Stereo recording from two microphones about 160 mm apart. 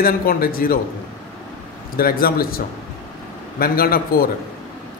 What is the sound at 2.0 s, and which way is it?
A man's voice, 65° left (ahead or behind).